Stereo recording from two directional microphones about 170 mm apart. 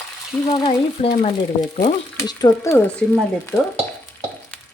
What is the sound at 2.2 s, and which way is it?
Speech, 20° left (ahead or behind).